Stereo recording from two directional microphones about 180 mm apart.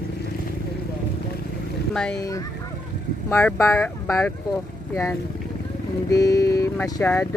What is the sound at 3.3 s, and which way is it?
Speech, 15° left (ahead or behind).